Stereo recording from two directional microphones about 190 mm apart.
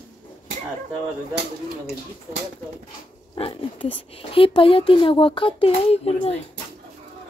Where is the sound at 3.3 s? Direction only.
25° left (ahead or behind).